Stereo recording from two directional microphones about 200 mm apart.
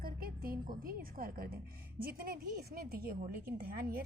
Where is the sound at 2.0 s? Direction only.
45° right (ahead or behind).